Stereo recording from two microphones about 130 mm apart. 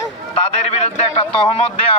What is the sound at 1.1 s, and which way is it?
Speech, 45° left (ahead or behind).